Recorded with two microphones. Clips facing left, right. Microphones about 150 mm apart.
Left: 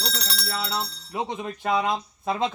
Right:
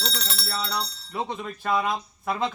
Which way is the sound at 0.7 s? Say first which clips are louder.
Left 1 dB; 20° left (ahead or behind).